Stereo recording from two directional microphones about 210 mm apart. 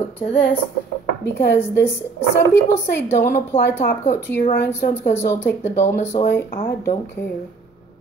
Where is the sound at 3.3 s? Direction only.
40° left (ahead or behind).